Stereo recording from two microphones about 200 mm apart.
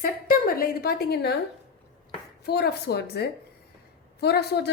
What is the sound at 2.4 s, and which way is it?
A woman's voice, 55° left (ahead or behind).